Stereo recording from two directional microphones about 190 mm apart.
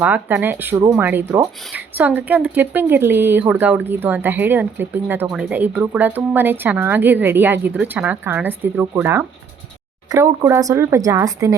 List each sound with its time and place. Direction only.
0.0 s speech: 10° right (ahead or behind)